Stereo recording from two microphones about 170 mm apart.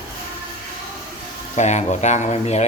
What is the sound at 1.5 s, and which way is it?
Speech, 40° left (ahead or behind).